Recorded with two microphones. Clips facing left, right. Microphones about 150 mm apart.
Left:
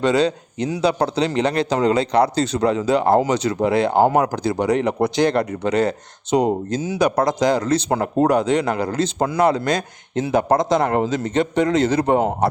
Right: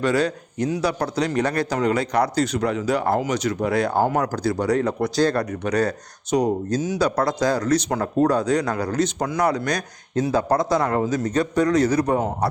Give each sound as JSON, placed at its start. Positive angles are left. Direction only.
{"t": 0.0, "sound": "speech", "side_deg": 20}